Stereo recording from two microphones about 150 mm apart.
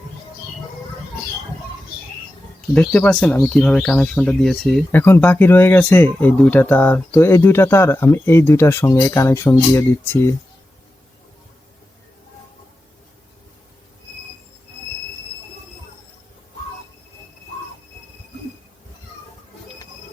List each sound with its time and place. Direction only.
2.7 s speech: 10° left (ahead or behind)
4.9 s speech: 15° left (ahead or behind)